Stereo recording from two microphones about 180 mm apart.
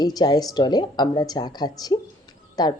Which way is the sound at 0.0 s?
20° left (ahead or behind).